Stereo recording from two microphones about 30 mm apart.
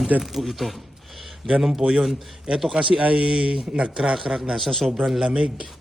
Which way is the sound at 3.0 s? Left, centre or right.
Right.